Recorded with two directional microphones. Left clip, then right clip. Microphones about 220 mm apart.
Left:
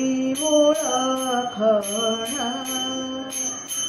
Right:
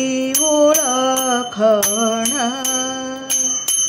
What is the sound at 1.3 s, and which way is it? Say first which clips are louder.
Music: right 3 dB; 55° right (ahead or behind).